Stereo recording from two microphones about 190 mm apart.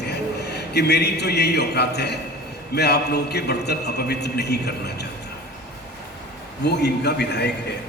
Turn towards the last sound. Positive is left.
turn(degrees=60)  # may be behind; listen again after turning